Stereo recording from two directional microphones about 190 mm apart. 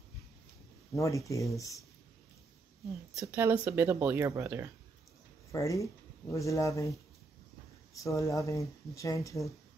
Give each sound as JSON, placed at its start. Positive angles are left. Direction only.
{"t": 0.9, "sound": "speech", "side_deg": 15}
{"t": 3.2, "sound": "speech", "side_deg": -15}
{"t": 5.5, "sound": "speech", "side_deg": 15}
{"t": 8.0, "sound": "speech", "side_deg": 15}